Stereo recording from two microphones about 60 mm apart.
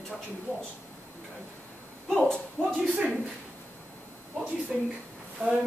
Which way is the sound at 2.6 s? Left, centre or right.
Centre.